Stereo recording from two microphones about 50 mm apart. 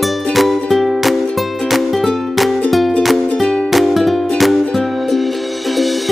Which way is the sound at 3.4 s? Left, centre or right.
Centre.